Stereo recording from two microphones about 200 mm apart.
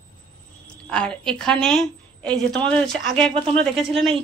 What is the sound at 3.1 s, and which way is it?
Speech, 25° right (ahead or behind).